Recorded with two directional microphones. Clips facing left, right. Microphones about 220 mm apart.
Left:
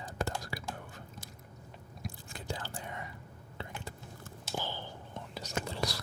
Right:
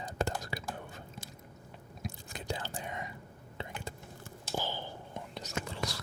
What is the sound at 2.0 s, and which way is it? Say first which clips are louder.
Whispering: right 2 dB; 20° right (ahead or behind).